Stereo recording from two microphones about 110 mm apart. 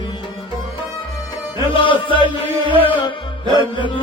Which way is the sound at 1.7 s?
50° left (ahead or behind).